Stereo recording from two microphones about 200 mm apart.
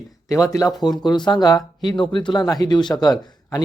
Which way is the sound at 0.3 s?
15° left (ahead or behind).